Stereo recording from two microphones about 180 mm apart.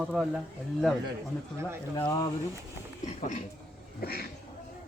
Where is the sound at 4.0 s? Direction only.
60° left (ahead or behind).